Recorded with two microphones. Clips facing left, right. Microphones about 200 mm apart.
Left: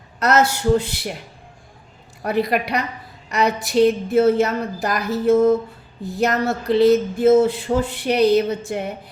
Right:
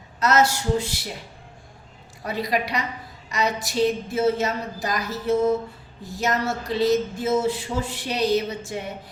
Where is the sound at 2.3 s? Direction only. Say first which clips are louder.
Left 5 dB; 60° left (ahead or behind).